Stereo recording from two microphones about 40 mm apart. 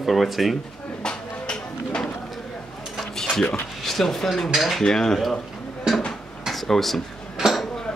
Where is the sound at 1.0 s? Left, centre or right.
Left.